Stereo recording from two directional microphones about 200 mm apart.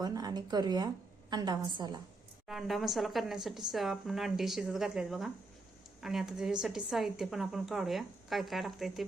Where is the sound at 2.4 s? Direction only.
Centre (ahead or behind).